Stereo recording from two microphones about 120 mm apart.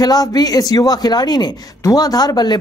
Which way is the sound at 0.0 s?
35° left (ahead or behind).